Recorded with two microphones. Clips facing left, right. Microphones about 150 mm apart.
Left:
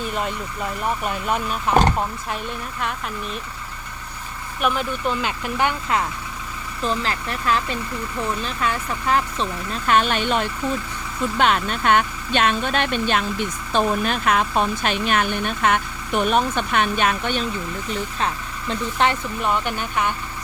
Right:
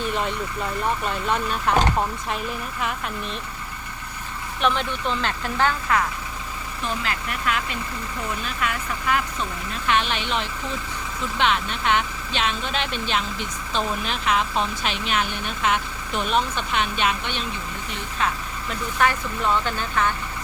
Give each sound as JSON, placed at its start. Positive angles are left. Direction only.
{"t": 0.0, "sound": "vehicle", "side_deg": 0}
{"t": 1.0, "sound": "speech", "side_deg": 5}
{"t": 4.6, "sound": "speech", "side_deg": 5}
{"t": 6.8, "sound": "speech", "side_deg": 35}
{"t": 18.7, "sound": "speech", "side_deg": 25}